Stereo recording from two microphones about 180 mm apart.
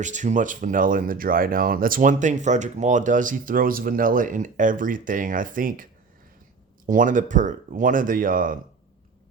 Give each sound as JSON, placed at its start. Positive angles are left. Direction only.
{"t": 0.0, "sound": "speech", "side_deg": -45}